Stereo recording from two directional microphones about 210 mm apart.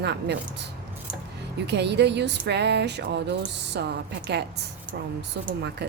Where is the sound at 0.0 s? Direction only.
55° right (ahead or behind).